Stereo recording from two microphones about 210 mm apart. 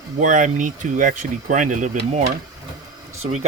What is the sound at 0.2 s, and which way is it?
Speech, 35° right (ahead or behind).